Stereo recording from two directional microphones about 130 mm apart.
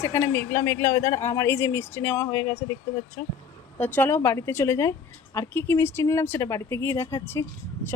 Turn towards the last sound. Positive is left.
turn(degrees=20)  # may be behind; listen again after turning